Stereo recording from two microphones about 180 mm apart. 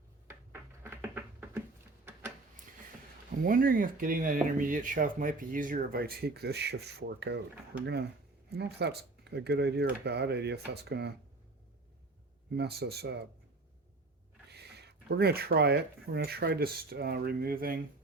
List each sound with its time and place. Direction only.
0.3 s a sound: 15° right (ahead or behind)
3.4 s speech: 50° right (ahead or behind); by 7.4 s 70° right (ahead or behind)
8.5 s speech: 65° right (ahead or behind)
12.5 s speech: 65° right (ahead or behind)
14.5 s speech: 65° right (ahead or behind)